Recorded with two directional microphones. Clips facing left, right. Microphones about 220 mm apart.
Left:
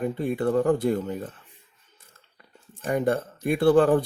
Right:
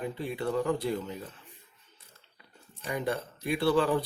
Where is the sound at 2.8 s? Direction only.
50° left (ahead or behind).